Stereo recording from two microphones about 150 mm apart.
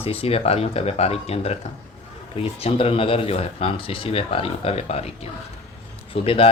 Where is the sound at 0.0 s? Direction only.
40° left (ahead or behind).